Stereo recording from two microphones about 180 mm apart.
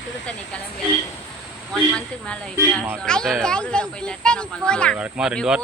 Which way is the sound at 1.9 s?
5° left (ahead or behind).